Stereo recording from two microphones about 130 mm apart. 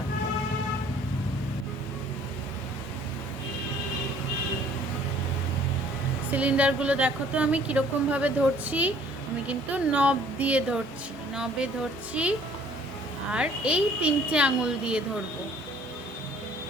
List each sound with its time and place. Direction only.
6.3 s a woman's voice: 10° right (ahead or behind)
12.1 s a woman's voice: 10° right (ahead or behind)